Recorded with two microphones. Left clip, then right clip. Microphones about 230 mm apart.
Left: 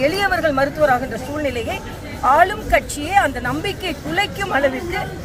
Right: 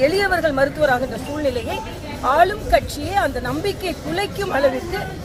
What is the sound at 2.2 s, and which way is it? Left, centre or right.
A woman's voice, centre.